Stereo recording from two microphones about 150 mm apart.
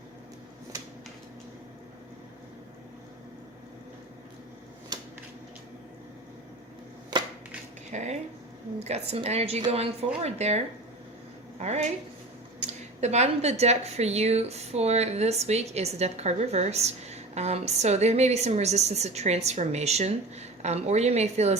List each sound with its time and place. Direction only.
4.9 s a sound: 25° right (ahead or behind)
7.9 s a woman's voice: 50° right (ahead or behind)
11.6 s a woman's voice: 50° right (ahead or behind)